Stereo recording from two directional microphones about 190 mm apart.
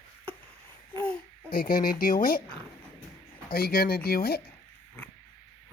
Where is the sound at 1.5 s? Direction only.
50° left (ahead or behind).